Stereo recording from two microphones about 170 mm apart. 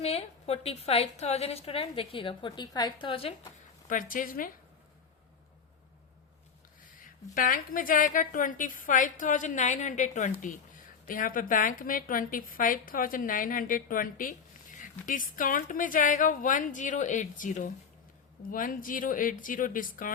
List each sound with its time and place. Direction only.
0.0 s a woman's voice: 35° left (ahead or behind)
3.8 s a woman's voice: 55° left (ahead or behind)
7.3 s a woman's voice: 55° left (ahead or behind)